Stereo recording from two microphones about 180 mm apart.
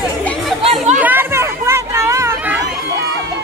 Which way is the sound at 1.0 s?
15° right (ahead or behind).